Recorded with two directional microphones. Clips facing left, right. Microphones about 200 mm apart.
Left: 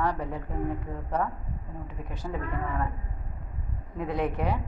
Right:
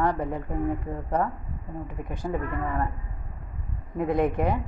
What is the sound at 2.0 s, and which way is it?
Speech, 55° right (ahead or behind).